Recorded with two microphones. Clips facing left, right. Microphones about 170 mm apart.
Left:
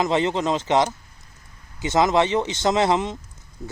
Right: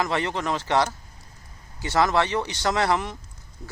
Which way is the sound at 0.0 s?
20° left (ahead or behind).